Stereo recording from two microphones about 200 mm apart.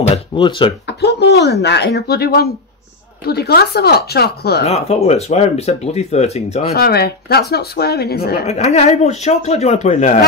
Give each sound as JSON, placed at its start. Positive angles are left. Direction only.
{"t": 0.1, "sound": "speech", "side_deg": 25}
{"t": 0.8, "sound": "speech", "side_deg": 55}
{"t": 4.6, "sound": "speech", "side_deg": 30}
{"t": 6.7, "sound": "speech", "side_deg": 50}
{"t": 8.5, "sound": "speech", "side_deg": 30}